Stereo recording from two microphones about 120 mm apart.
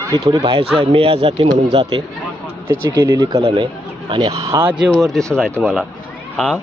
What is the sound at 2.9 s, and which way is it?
Speech, 25° right (ahead or behind).